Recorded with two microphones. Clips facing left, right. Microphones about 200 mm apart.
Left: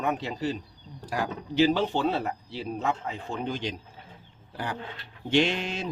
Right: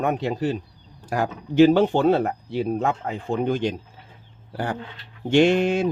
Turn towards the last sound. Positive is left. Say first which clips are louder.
# right 9 dB
turn(degrees=-50)  # may be behind; listen again after turning